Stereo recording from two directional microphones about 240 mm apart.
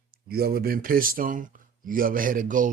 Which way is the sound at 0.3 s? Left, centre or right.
Right.